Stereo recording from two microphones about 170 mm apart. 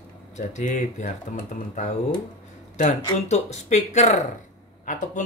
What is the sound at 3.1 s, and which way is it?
Speech, 40° left (ahead or behind).